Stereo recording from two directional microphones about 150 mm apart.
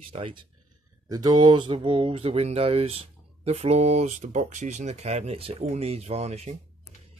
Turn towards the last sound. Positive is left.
turn(degrees=-45)  # may be behind; listen again after turning